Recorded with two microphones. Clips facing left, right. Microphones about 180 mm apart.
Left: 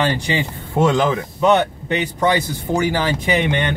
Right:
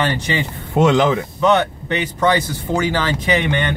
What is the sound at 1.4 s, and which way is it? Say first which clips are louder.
Speech: left 1 dB; 15° left (ahead or behind).